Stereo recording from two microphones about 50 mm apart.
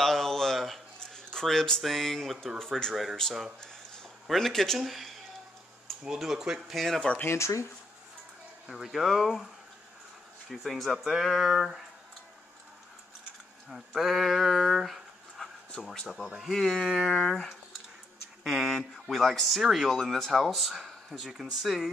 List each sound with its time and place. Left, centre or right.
0.0 s a sound: centre
1.8 s speech: centre
4.3 s speech: centre
6.1 s speech: centre
6.7 s speech: centre
7.2 s speech: left
8.6 s speech: centre
10.5 s speech: centre
13.7 s speech: centre
17.1 s speech: centre
18.4 s speech: centre